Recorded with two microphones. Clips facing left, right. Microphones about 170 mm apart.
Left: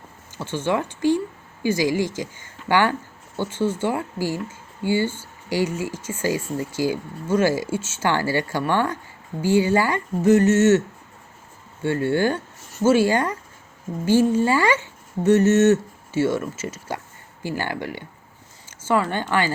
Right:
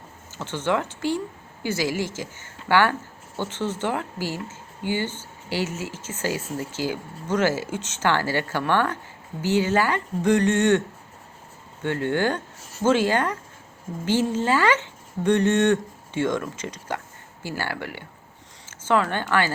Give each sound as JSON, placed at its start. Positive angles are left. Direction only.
{"t": 0.3, "sound": "speech", "side_deg": 10}
{"t": 10.2, "sound": "a sound", "side_deg": 5}
{"t": 11.8, "sound": "speech", "side_deg": 10}
{"t": 14.3, "sound": "speech", "side_deg": 10}